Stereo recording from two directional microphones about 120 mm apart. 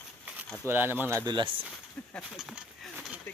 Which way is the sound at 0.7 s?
15° right (ahead or behind).